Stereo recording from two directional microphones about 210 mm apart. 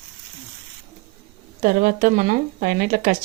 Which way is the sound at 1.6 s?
40° right (ahead or behind).